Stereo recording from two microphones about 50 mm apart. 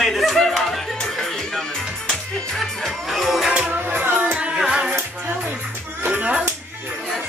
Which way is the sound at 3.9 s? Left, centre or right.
Right.